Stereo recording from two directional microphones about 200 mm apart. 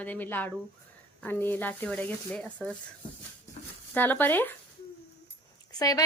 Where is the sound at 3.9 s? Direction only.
10° left (ahead or behind).